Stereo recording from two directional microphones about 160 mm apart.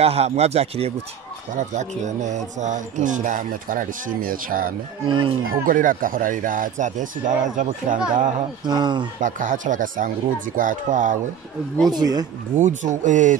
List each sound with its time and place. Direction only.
0.0 s speech: 40° right (ahead or behind)
1.6 s speech: 50° right (ahead or behind)
5.0 s speech: 30° right (ahead or behind)
5.5 s speech: 60° right (ahead or behind)
8.6 s speech: 25° right (ahead or behind)
9.2 s speech: 55° right (ahead or behind)
11.9 s speech: 25° right (ahead or behind)
12.5 s speech: 50° right (ahead or behind)